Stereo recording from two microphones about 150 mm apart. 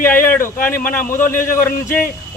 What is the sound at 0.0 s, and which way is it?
Speech, 15° left (ahead or behind).